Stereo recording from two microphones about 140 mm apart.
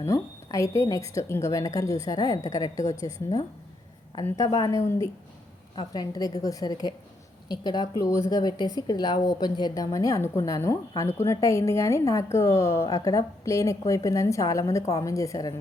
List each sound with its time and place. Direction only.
0.0 s speech: 20° left (ahead or behind)